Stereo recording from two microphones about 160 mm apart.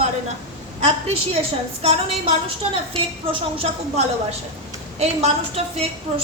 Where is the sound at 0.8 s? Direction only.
40° right (ahead or behind).